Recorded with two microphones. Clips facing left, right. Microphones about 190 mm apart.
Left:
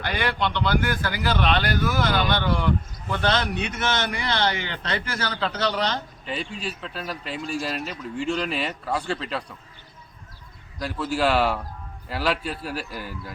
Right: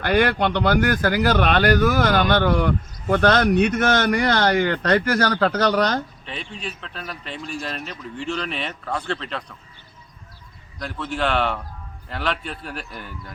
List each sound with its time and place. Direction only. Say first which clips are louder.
0.0 s speech: right 7 dB; 50° right (ahead or behind)
5.3 s speech: right 7 dB; 60° right (ahead or behind)
6.2 s speech: left 2 dB; 5° left (ahead or behind)
10.8 s speech: left 2 dB; 5° left (ahead or behind)